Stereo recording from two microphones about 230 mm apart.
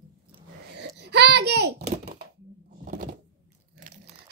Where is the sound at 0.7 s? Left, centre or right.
Right.